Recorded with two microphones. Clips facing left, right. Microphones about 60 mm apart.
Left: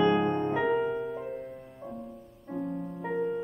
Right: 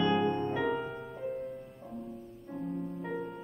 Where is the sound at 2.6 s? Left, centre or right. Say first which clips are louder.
Left 1 dB; centre.